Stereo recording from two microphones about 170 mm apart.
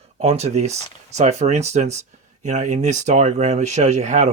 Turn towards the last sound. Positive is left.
turn(degrees=-45)  # may be behind; listen again after turning